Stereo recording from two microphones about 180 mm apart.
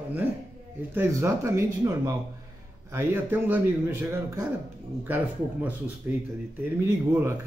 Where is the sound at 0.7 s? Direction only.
15° right (ahead or behind).